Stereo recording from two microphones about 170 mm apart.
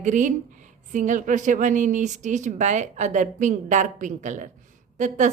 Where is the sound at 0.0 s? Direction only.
45° right (ahead or behind).